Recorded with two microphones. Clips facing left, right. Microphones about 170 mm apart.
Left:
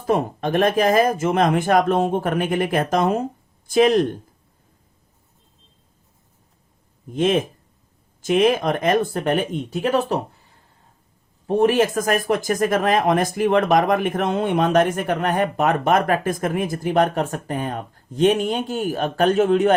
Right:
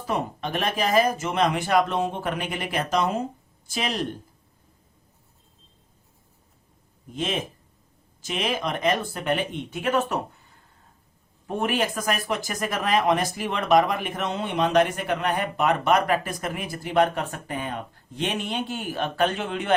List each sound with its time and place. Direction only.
0.0 s speech: 45° left (ahead or behind)
7.2 s speech: 50° left (ahead or behind)
11.4 s speech: 35° left (ahead or behind)